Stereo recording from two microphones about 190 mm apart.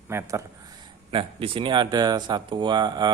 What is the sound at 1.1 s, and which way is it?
A man's voice, 30° right (ahead or behind).